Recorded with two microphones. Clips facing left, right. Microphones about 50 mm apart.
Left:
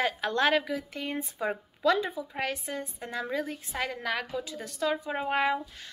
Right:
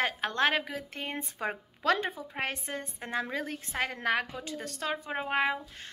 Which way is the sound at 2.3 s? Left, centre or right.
Right.